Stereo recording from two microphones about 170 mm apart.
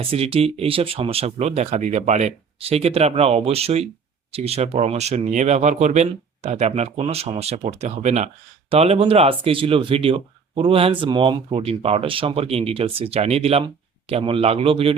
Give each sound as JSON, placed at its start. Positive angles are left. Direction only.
{"t": 0.0, "sound": "speech", "side_deg": -35}